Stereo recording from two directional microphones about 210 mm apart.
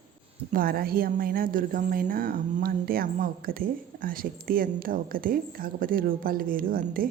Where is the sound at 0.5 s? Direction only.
45° right (ahead or behind).